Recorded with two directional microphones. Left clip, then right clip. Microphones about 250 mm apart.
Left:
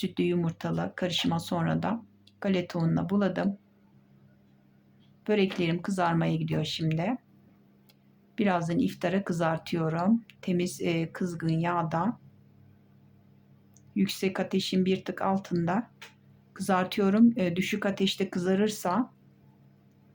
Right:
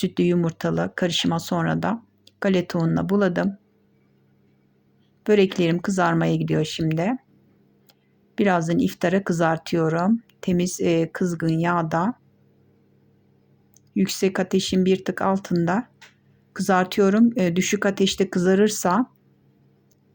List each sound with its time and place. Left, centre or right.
0.0 s speech: right
5.2 s speech: right
8.4 s speech: right
13.9 s speech: centre